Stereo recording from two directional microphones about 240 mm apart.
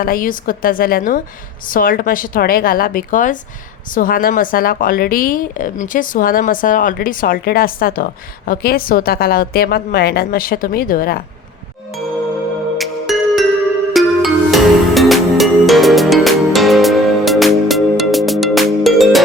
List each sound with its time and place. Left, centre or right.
0.0 s speech: left
12.7 s music: centre